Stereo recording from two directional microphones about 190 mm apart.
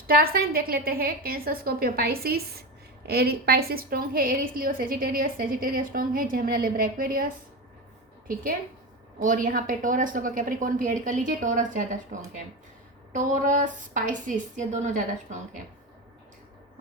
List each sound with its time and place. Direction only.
0.1 s a woman's voice: 50° right (ahead or behind)
9.2 s a woman's voice: 45° right (ahead or behind)